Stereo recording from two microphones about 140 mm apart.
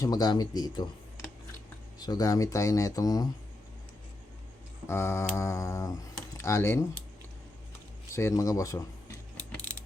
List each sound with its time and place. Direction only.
0.0 s speech: 30° left (ahead or behind)
2.0 s speech: 25° left (ahead or behind)
4.9 s speech: 15° left (ahead or behind)
8.1 s keys jangling: 20° left (ahead or behind)